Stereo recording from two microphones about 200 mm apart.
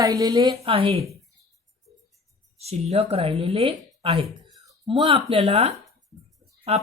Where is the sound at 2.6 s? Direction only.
30° right (ahead or behind).